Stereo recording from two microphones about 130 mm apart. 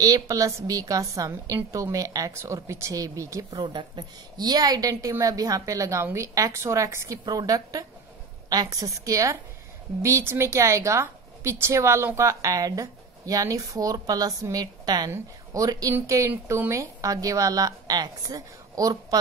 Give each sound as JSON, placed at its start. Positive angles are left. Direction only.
{"t": 0.0, "sound": "a woman's voice", "side_deg": -25}